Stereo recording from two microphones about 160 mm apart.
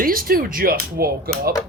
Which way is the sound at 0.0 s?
65° right (ahead or behind).